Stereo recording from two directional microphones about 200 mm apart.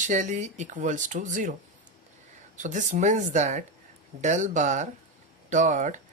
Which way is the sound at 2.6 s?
40° right (ahead or behind).